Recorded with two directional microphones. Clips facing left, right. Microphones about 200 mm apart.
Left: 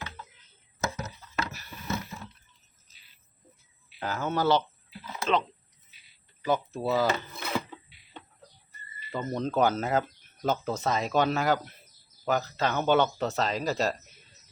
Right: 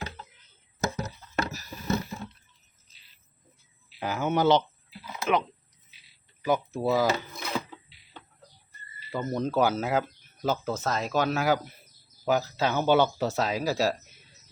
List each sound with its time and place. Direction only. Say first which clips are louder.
0.9 s a sound: right 3 dB; 40° right (ahead or behind)
4.0 s speech: right 3 dB; 15° right (ahead or behind)
9.1 s speech: right 1 dB; 10° right (ahead or behind)